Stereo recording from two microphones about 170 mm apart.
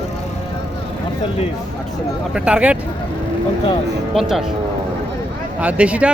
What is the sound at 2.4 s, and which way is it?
Speech, 5° right (ahead or behind).